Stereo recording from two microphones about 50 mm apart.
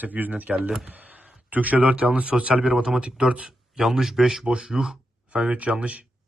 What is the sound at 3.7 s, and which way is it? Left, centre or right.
Speech, centre.